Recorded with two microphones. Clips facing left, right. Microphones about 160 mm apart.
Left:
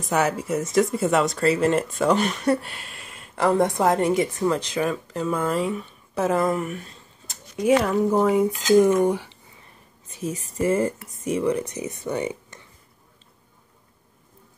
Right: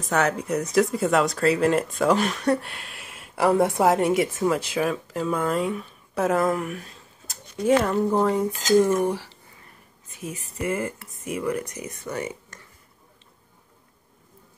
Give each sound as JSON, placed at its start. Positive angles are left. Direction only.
{"t": 0.1, "sound": "speech", "side_deg": 5}
{"t": 8.7, "sound": "speech", "side_deg": 15}
{"t": 10.1, "sound": "speech", "side_deg": 35}
{"t": 11.2, "sound": "speech", "side_deg": 25}